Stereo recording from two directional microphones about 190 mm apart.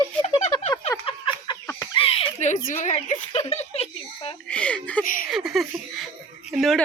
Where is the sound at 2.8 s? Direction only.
35° left (ahead or behind).